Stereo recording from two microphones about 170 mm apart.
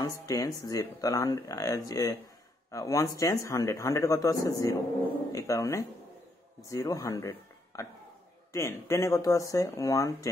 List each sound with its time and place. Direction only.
0.0 s speech: 20° left (ahead or behind)